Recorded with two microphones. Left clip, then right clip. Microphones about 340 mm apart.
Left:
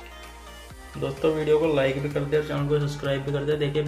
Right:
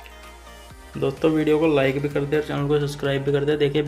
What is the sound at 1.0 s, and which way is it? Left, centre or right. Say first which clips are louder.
Speech: right 4 dB; right.